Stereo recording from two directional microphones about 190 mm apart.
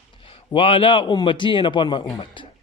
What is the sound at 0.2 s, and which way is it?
A man's voice, 30° left (ahead or behind).